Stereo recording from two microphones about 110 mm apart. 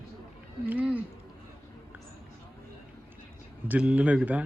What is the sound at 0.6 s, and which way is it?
Speech, 15° right (ahead or behind).